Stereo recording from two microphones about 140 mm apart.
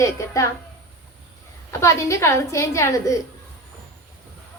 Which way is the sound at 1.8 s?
20° left (ahead or behind).